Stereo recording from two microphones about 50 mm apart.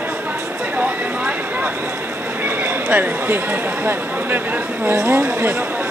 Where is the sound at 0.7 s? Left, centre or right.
Right.